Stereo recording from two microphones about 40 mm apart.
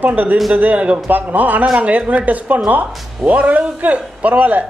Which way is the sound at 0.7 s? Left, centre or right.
Right.